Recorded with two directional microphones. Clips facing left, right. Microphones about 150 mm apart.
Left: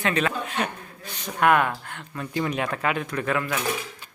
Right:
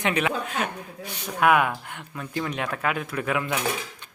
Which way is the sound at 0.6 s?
5° right (ahead or behind).